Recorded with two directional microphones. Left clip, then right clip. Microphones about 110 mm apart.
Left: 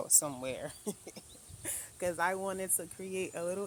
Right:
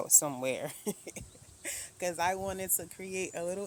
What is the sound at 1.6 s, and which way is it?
Speech, 30° right (ahead or behind).